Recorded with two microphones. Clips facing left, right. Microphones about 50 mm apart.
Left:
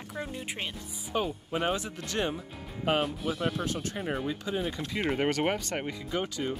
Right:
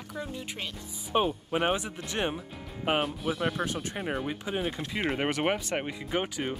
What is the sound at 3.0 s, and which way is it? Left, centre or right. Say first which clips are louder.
Speech: right 1 dB; centre.